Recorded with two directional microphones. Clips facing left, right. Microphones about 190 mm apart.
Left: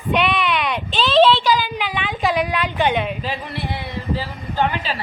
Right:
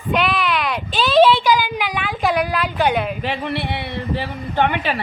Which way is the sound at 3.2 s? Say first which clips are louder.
Right 4 dB; 65° right (ahead or behind).